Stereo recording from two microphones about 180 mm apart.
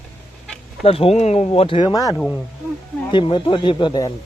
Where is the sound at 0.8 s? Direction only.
35° left (ahead or behind).